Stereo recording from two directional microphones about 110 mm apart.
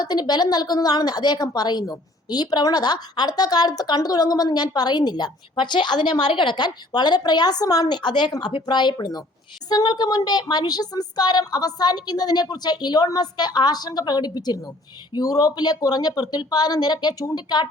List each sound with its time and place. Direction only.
0.0 s a woman's voice: 40° left (ahead or behind)